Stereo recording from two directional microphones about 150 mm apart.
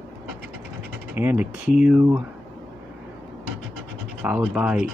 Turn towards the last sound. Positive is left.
turn(degrees=-10)  # may be behind; listen again after turning